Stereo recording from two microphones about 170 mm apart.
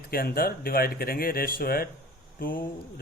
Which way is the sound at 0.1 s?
60° left (ahead or behind).